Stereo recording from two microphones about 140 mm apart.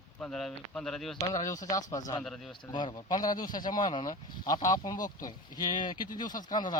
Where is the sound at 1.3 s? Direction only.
25° left (ahead or behind).